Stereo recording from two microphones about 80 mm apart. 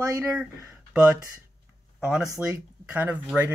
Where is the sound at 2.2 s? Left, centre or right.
Right.